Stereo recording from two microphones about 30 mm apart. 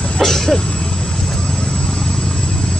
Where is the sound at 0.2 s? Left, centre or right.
Centre.